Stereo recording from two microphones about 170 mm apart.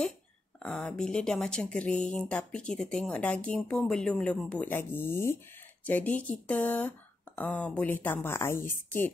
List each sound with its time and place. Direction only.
0.6 s a woman's voice: 5° left (ahead or behind)